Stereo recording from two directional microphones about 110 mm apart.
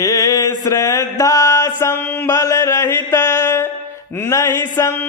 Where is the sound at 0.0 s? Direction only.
30° left (ahead or behind).